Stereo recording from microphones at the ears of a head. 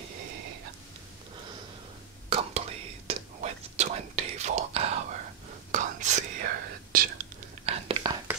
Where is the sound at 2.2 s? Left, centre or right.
Right.